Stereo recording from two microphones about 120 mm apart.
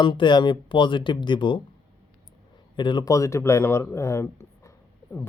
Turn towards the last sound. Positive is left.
turn(degrees=25)  # may be behind; listen again after turning